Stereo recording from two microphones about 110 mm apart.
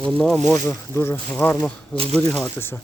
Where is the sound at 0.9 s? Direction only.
20° left (ahead or behind).